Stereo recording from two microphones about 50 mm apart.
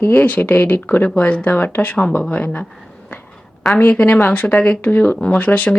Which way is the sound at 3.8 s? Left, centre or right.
Left.